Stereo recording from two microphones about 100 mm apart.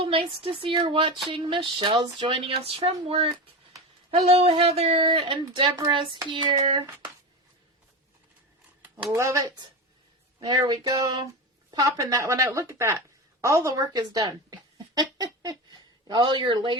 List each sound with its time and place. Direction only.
0.0 s speech: 65° right (ahead or behind)
4.1 s speech: 80° right; by 6.6 s 55° right (ahead or behind)
9.1 s speech: 30° right (ahead or behind)
10.4 s a sound: 40° right (ahead or behind)
11.7 s speech: 35° right (ahead or behind)